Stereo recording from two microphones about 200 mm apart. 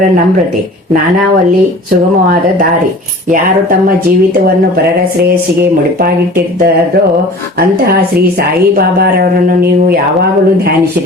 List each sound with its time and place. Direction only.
8.4 s speech: 50° right (ahead or behind)